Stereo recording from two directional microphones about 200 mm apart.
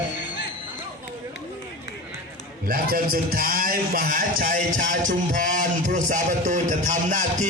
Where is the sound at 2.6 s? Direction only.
45° right (ahead or behind).